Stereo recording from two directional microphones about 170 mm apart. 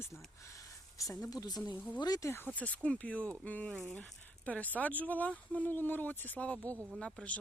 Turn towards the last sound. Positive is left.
turn(degrees=5)  # may be behind; listen again after turning